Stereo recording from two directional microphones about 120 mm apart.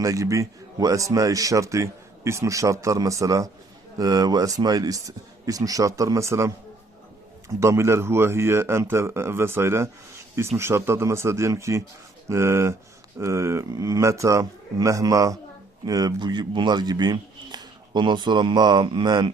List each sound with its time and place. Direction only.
0.0 s a man's voice: 25° right (ahead or behind)
7.6 s a man's voice: 25° right (ahead or behind); by 19.3 s 40° right (ahead or behind)